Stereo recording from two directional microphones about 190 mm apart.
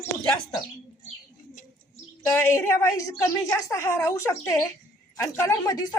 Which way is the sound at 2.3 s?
15° left (ahead or behind).